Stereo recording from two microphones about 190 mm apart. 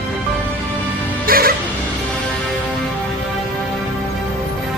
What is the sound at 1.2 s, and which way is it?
Music, 50° right (ahead or behind).